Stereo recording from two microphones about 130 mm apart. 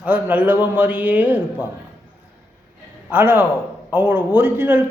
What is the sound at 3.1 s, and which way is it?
A man's voice, 15° right (ahead or behind).